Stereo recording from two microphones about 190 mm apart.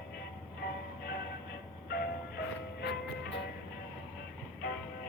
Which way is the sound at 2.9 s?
65° left (ahead or behind).